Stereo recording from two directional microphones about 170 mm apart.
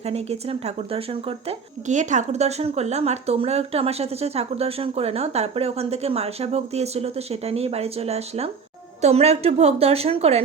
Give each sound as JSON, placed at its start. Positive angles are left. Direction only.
{"t": 0.0, "sound": "a woman's voice", "side_deg": -35}